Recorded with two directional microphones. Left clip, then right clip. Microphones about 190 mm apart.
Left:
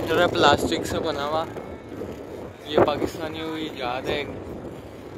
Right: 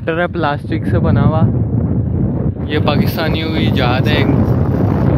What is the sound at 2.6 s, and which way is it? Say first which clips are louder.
Speech: right 3 dB; 5° right (ahead or behind).